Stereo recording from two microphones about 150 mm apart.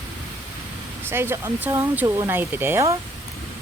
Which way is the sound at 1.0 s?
15° right (ahead or behind).